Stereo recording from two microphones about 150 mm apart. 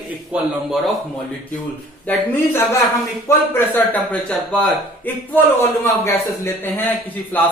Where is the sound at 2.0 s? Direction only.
15° left (ahead or behind).